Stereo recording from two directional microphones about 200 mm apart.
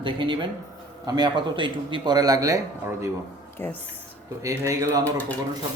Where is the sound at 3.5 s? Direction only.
10° left (ahead or behind).